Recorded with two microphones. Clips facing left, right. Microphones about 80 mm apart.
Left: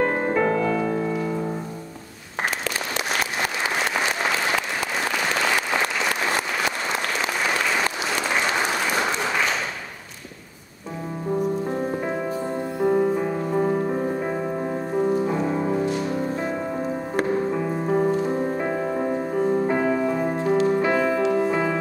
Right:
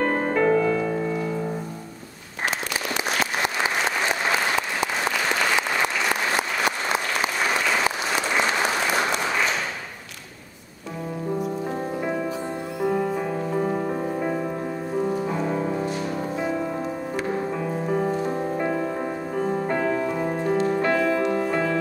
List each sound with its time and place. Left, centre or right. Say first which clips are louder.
0.0 s music: even; centre
12.0 s music: left 1 dB; centre
15.2 s music: left 2 dB; centre
17.5 s music: left 2 dB; centre
18.7 s music: left 1 dB; left
18.9 s music: left 4 dB; centre